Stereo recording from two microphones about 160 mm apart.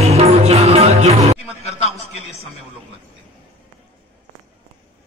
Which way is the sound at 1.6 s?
40° left (ahead or behind).